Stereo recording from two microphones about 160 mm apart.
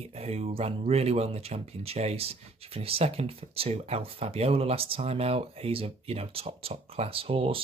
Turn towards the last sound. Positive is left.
turn(degrees=-35)  # may be behind; listen again after turning